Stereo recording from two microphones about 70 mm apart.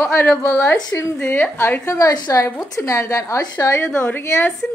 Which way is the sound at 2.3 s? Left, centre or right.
Left.